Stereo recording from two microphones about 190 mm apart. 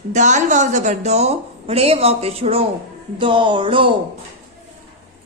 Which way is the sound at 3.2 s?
25° right (ahead or behind).